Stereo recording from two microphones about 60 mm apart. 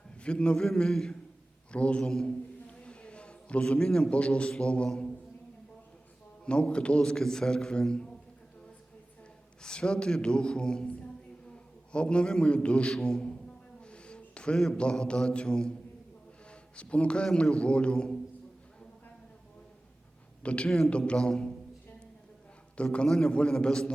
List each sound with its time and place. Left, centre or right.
0.2 s a man's voice: centre
1.7 s a man's voice: centre
6.4 s a man's voice: centre
9.6 s a man's voice: centre
13.8 s a sound: centre
17.3 s a man's voice: centre
20.4 s a man's voice: centre
20.7 s a man's voice: centre
20.9 s a man's voice: centre
22.8 s a man's voice: centre